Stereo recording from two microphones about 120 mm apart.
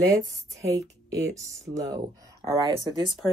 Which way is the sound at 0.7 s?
30° right (ahead or behind).